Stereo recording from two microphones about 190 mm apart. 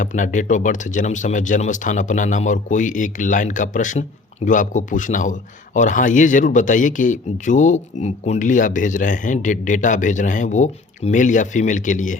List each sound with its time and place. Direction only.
0.0 s speech: 40° left (ahead or behind)